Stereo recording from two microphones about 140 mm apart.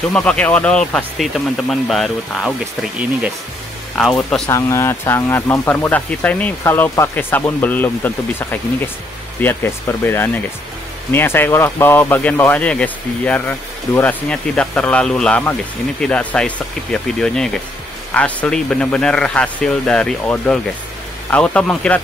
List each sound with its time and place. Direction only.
0.1 s speech: 5° left (ahead or behind)
3.9 s speech: 5° left (ahead or behind)
4.5 s speech: 20° left (ahead or behind)